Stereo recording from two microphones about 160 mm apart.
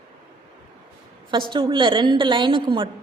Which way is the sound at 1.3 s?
30° right (ahead or behind).